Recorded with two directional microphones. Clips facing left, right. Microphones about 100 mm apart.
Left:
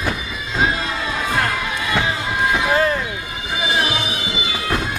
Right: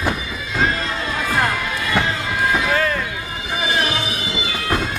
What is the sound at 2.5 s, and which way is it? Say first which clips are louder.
Music: left 3 dB; 25° left (ahead or behind).